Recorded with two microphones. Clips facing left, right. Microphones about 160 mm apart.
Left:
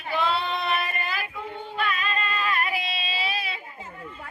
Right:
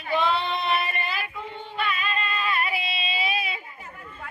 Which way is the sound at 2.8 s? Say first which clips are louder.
Right 1 dB; 40° left (ahead or behind).